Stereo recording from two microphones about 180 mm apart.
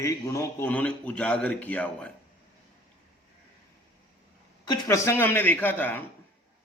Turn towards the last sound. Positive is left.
turn(degrees=10)  # may be behind; listen again after turning